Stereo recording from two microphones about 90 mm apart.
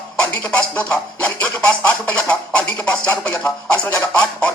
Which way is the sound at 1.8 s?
15° left (ahead or behind).